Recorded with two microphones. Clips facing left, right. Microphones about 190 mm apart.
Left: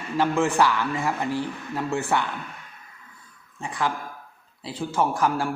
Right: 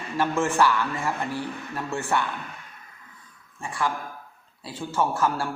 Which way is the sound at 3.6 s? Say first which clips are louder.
Left 1 dB; 15° left (ahead or behind).